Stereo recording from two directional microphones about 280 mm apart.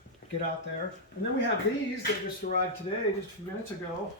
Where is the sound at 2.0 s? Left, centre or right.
Left.